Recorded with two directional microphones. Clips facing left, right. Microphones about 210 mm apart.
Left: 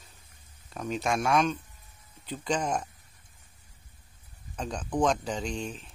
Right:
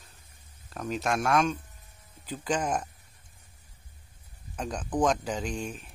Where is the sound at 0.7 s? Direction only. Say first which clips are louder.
Even; centre (ahead or behind).